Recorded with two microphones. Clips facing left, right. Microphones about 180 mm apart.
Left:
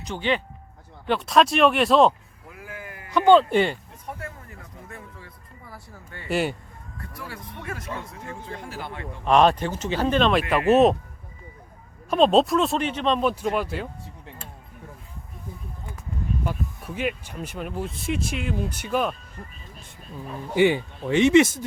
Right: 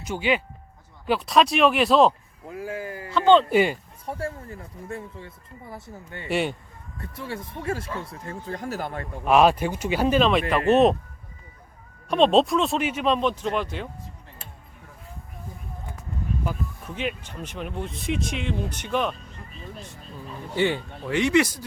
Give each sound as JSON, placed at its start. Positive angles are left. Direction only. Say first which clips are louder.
{"t": 0.0, "sound": "speech", "louder": "right 1 dB", "side_deg": -10}
{"t": 2.5, "sound": "a sound", "louder": "right 8 dB", "side_deg": -30}
{"t": 3.1, "sound": "speech", "louder": "left 1 dB", "side_deg": 15}
{"t": 3.5, "sound": "speech", "louder": "right 1 dB", "side_deg": -10}
{"t": 4.0, "sound": "speech", "louder": "right 7 dB", "side_deg": -30}
{"t": 6.2, "sound": "speech", "louder": "left 1 dB", "side_deg": 0}
{"t": 7.0, "sound": "speech", "louder": "right 5 dB", "side_deg": -25}
{"t": 9.2, "sound": "speech", "louder": "even", "side_deg": -5}
{"t": 12.0, "sound": "speech", "louder": "even", "side_deg": 0}
{"t": 13.1, "sound": "speech", "louder": "left 1 dB", "side_deg": 5}
{"t": 16.8, "sound": "speech", "louder": "left 3 dB", "side_deg": 5}
{"t": 20.6, "sound": "speech", "louder": "left 4 dB", "side_deg": 15}